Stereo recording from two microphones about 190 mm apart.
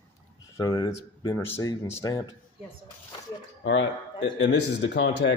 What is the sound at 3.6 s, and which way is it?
Speech, 75° left (ahead or behind).